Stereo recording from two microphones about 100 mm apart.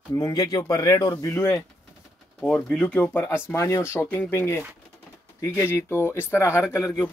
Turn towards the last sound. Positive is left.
turn(degrees=30)  # may be behind; listen again after turning